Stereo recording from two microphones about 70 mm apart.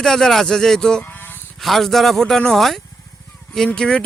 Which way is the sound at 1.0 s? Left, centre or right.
Left.